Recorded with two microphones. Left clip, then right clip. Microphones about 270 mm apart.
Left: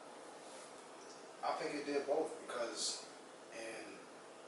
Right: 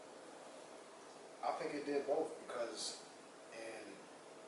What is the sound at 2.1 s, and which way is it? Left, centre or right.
Speech, centre.